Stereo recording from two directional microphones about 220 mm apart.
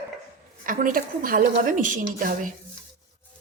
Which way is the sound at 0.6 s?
40° right (ahead or behind).